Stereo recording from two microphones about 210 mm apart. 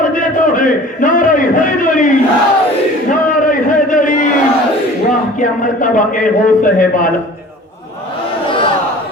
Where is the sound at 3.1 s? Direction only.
40° left (ahead or behind).